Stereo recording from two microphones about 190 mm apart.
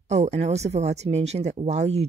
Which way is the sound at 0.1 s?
35° right (ahead or behind).